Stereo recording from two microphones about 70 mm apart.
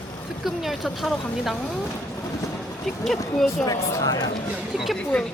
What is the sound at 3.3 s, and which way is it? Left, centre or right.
Speech, centre.